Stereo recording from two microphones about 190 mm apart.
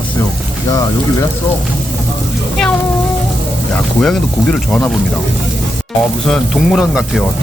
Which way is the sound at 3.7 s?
5° left (ahead or behind).